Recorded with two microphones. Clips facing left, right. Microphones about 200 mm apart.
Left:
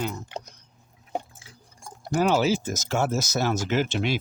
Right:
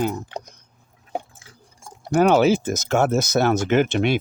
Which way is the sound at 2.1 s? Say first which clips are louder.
Right 6 dB; 60° right (ahead or behind).